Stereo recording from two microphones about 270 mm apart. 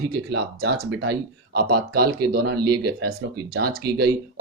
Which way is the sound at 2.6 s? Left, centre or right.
Right.